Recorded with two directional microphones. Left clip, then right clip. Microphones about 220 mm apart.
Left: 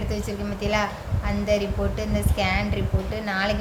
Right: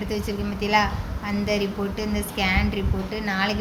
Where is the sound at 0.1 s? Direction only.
10° left (ahead or behind).